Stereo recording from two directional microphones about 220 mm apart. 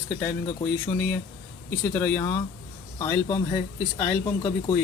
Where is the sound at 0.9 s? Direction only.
10° left (ahead or behind).